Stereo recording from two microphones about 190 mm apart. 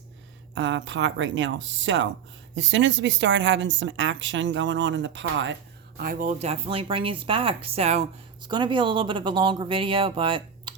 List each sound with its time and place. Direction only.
0.5 s speech: 70° right (ahead or behind)
6.0 s speech: 45° right (ahead or behind); by 10.8 s 25° right (ahead or behind)